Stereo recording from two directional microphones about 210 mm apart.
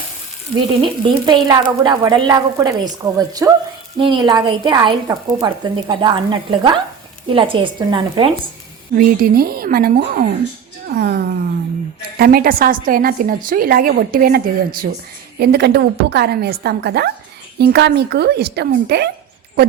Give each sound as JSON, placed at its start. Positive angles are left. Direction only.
{"t": 0.8, "sound": "a woman's voice", "side_deg": -20}
{"t": 9.0, "sound": "a woman's voice", "side_deg": -45}